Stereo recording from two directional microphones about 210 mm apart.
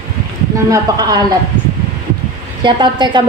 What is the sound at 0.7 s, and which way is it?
Speech, 20° right (ahead or behind).